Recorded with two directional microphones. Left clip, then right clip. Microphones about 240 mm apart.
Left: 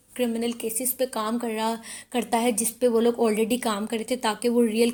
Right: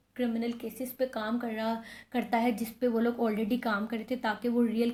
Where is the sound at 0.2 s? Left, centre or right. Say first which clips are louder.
Left 6 dB; left.